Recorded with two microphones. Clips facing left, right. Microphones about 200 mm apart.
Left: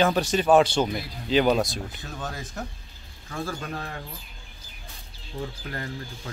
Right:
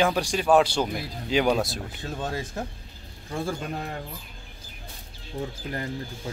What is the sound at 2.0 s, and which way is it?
Speech, 30° right (ahead or behind).